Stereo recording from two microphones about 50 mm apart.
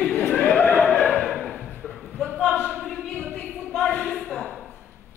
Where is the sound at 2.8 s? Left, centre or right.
Centre.